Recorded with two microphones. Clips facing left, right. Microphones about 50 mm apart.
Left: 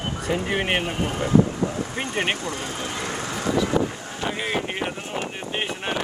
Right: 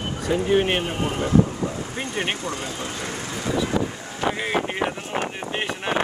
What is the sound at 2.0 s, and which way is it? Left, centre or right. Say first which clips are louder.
Speech: left 1 dB; left.